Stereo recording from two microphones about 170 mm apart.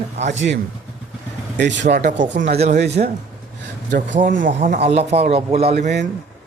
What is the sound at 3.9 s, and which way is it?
Speech, 50° right (ahead or behind).